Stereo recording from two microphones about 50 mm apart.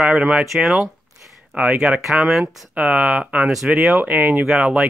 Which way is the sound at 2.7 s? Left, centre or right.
Right.